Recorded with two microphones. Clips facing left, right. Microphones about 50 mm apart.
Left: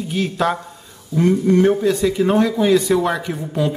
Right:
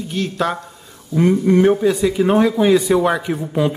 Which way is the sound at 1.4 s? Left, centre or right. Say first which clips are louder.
Right 2 dB; centre.